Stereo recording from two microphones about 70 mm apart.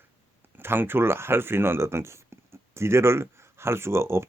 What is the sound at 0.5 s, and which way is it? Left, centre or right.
Speech, right.